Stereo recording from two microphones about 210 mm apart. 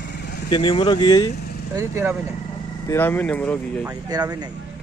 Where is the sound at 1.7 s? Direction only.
15° right (ahead or behind).